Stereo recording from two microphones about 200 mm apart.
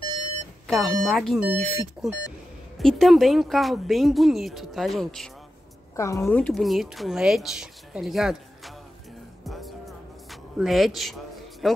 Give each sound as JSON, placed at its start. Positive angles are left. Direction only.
{"t": 0.7, "sound": "speech", "side_deg": 0}
{"t": 5.9, "sound": "speech", "side_deg": 15}
{"t": 9.4, "sound": "music", "side_deg": 0}
{"t": 11.6, "sound": "speech", "side_deg": 0}